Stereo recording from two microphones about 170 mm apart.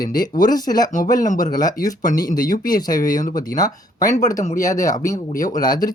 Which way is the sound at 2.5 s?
55° left (ahead or behind).